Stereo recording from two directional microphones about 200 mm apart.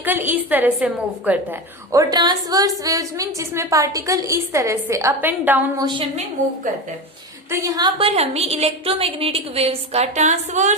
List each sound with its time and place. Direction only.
0.0 s a woman's voice: 10° right (ahead or behind)
7.5 s a woman's voice: 20° right (ahead or behind); by 10.8 s 35° right (ahead or behind)